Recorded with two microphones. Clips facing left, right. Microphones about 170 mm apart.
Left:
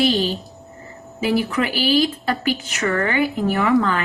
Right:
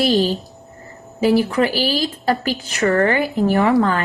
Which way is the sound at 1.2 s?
40° right (ahead or behind).